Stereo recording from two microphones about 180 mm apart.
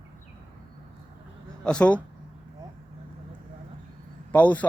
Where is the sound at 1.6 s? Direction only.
5° left (ahead or behind).